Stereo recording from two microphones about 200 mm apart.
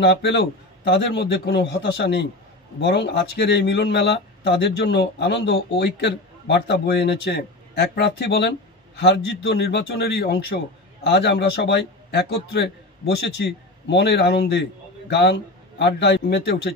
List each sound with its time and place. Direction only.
0.0 s a man's voice: 60° left (ahead or behind)